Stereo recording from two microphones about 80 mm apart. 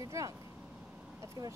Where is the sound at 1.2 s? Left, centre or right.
Right.